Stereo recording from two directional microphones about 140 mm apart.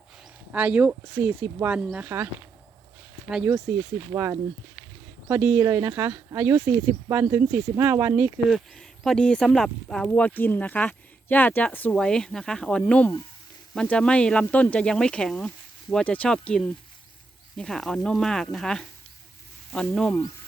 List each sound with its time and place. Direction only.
0.5 s speech: 10° right (ahead or behind)
8.4 s speech: centre (ahead or behind)